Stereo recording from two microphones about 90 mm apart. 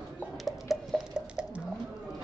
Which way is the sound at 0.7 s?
Centre (ahead or behind).